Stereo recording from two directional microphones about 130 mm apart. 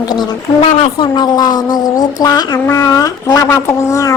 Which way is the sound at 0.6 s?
55° left (ahead or behind).